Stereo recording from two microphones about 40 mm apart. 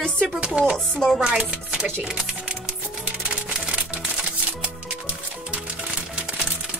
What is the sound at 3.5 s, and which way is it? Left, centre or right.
Music, right.